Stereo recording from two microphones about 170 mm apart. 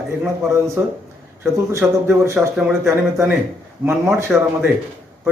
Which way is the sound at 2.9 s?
15° right (ahead or behind).